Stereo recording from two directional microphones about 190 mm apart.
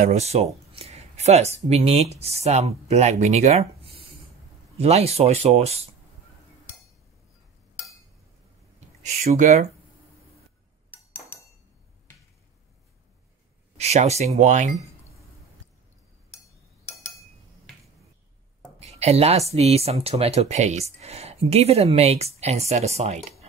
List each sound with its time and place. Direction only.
0.0 s speech: 35° right (ahead or behind)
0.7 s a sound: 35° right (ahead or behind)
1.7 s speech: 35° right (ahead or behind)
9.0 s speech: 40° right (ahead or behind)
10.9 s a sound: 10° left (ahead or behind)
13.7 s speech: 35° right (ahead or behind)
18.8 s speech: 35° right (ahead or behind)